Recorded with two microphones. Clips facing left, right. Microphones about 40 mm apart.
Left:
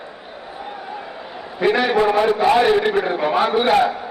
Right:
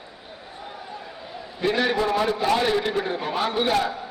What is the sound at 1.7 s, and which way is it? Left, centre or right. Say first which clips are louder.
A man's voice: left 6 dB; left.